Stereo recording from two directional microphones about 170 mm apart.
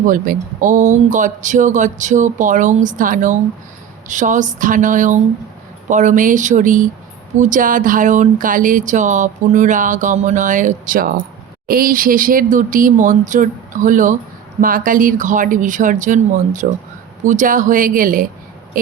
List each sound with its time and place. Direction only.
0.1 s speech: 50° right (ahead or behind)